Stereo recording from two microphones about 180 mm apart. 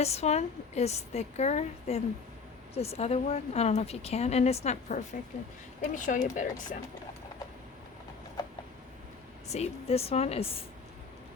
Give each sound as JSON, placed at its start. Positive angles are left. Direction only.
{"t": 0.0, "sound": "a woman's voice", "side_deg": 35}
{"t": 9.5, "sound": "a woman's voice", "side_deg": 35}